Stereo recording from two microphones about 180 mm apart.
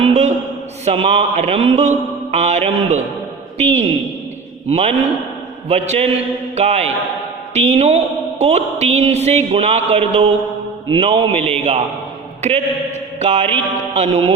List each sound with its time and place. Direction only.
0.0 s a sound: 35° right (ahead or behind)
0.9 s speech: 35° right (ahead or behind)
4.7 s a man's voice: 35° right (ahead or behind)